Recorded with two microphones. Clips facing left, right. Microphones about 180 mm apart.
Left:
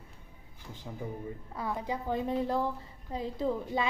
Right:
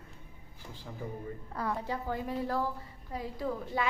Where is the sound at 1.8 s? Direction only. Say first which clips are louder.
Left 3 dB; 20° left (ahead or behind).